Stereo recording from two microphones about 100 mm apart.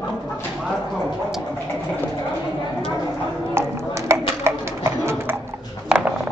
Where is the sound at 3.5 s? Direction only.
30° right (ahead or behind).